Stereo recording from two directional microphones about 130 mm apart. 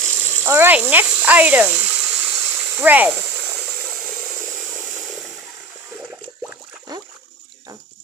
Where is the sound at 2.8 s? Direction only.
10° right (ahead or behind).